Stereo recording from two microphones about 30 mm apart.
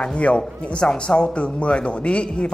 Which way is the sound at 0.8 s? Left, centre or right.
Left.